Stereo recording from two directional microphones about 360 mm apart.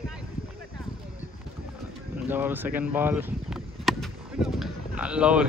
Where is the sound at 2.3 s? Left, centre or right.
Centre.